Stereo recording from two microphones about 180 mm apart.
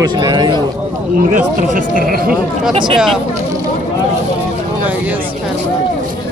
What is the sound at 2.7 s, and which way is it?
Speech, 30° right (ahead or behind).